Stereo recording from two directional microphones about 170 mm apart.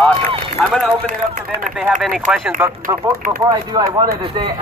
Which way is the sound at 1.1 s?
50° right (ahead or behind).